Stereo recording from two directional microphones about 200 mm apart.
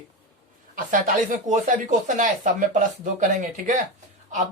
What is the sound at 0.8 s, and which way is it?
Speech, 40° right (ahead or behind).